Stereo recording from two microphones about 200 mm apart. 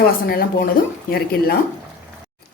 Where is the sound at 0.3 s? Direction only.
50° left (ahead or behind).